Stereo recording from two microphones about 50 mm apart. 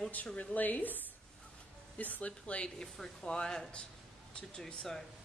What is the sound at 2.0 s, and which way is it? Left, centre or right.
Speech, left.